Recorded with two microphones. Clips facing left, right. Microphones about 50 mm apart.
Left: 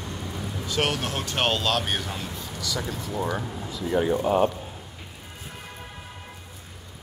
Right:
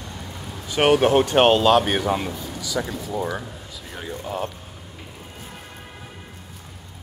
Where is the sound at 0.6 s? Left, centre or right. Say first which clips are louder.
Right 10 dB; centre.